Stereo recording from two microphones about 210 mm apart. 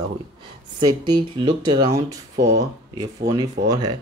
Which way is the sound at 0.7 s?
20° right (ahead or behind).